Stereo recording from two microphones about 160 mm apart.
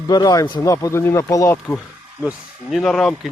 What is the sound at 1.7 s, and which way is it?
Speech, centre (ahead or behind).